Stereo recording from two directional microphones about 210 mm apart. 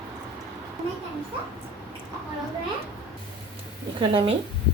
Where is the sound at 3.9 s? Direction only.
25° right (ahead or behind).